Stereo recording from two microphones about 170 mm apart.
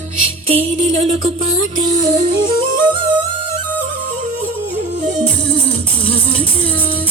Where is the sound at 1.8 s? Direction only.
25° right (ahead or behind).